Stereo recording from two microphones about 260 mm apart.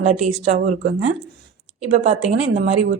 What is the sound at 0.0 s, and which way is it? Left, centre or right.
A woman's voice, right.